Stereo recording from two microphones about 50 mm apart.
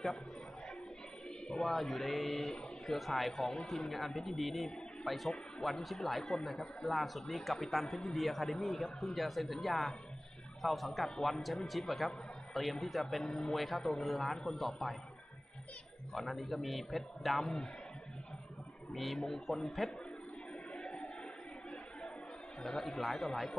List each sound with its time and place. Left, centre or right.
1.5 s a man's voice: centre
16.1 s a man's voice: centre
18.9 s a man's voice: centre
20.7 s a sound: centre
22.6 s a man's voice: centre